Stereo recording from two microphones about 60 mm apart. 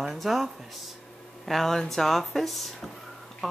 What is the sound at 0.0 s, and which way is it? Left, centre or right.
Speech, centre.